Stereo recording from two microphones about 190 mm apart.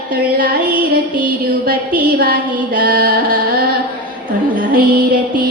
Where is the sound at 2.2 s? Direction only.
50° right (ahead or behind).